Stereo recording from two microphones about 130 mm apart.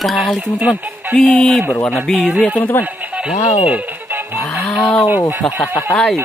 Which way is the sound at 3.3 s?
65° left (ahead or behind).